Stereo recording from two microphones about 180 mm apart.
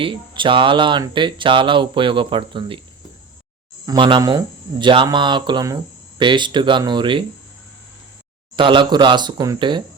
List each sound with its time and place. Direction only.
0.0 s speech: 30° right (ahead or behind)
3.8 s speech: 25° right (ahead or behind)
8.5 s speech: 25° right (ahead or behind)